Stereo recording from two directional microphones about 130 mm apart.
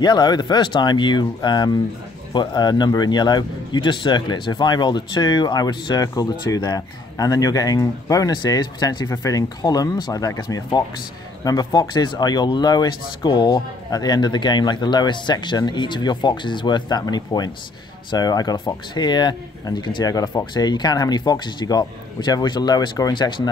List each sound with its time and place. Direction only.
0.0 s a man's voice: 30° left (ahead or behind)